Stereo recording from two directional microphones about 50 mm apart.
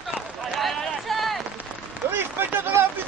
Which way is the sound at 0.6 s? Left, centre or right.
Centre.